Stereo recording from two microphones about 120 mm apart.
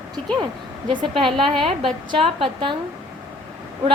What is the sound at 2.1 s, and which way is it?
Speech, 45° right (ahead or behind).